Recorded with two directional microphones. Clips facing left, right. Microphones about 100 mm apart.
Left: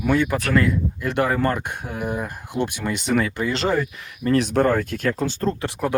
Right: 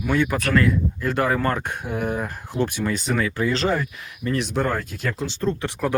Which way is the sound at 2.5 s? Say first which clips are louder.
Right 1 dB; 15° left (ahead or behind).